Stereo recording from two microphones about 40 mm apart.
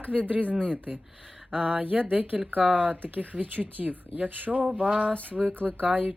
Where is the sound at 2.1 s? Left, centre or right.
Right.